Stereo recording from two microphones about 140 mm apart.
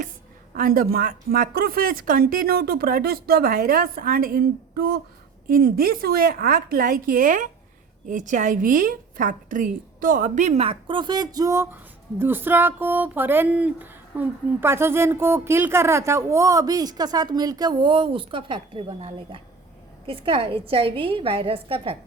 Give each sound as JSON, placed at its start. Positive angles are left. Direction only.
{"t": 0.5, "sound": "a woman's voice", "side_deg": -90}